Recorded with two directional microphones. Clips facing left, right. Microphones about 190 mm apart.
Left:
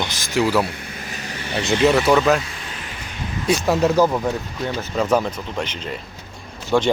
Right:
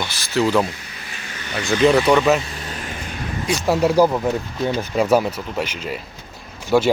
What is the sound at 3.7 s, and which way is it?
Speech, 10° right (ahead or behind).